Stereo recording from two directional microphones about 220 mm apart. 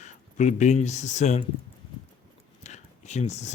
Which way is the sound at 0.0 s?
30° left (ahead or behind).